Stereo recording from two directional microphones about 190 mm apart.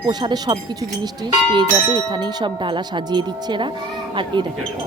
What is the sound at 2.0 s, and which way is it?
Speech, 25° right (ahead or behind).